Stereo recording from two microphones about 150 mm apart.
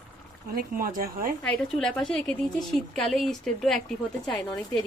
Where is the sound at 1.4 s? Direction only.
5° left (ahead or behind).